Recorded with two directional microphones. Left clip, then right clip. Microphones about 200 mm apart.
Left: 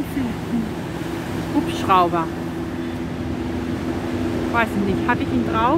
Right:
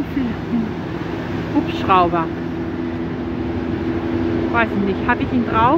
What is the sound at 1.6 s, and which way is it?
Speech, centre (ahead or behind).